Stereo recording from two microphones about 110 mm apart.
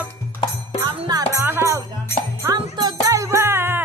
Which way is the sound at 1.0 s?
35° right (ahead or behind).